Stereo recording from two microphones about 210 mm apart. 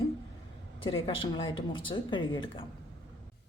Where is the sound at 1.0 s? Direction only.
25° left (ahead or behind).